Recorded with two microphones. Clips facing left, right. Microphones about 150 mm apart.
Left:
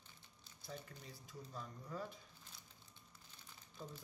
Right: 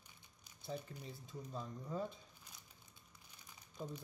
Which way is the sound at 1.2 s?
20° right (ahead or behind).